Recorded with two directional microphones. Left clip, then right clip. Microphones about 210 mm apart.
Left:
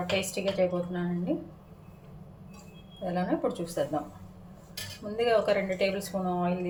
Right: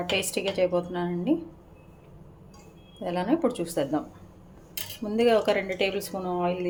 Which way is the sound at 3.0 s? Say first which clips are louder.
Right 4 dB; 35° right (ahead or behind).